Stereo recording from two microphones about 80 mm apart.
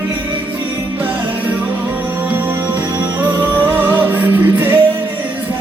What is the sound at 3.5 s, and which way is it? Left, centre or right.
Music, right.